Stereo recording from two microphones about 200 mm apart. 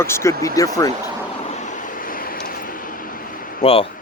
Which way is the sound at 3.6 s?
30° left (ahead or behind).